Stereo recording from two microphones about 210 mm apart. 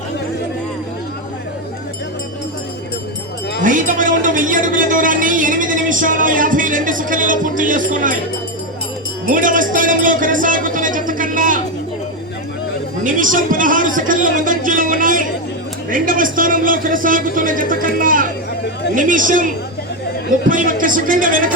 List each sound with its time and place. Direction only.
3.6 s a woman's voice: 40° right (ahead or behind)
9.2 s music: 40° right (ahead or behind)
13.1 s a woman's voice: 40° right (ahead or behind)
20.5 s a man's voice: 40° right (ahead or behind)